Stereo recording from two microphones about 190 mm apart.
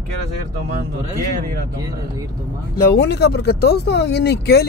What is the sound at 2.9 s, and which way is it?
Speech, 60° left (ahead or behind).